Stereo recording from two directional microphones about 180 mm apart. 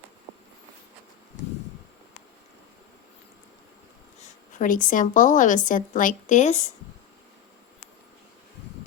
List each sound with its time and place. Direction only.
4.2 s a woman's voice: 45° left (ahead or behind)